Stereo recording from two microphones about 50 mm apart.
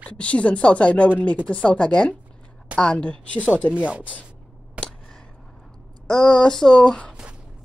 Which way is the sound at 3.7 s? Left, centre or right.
Right.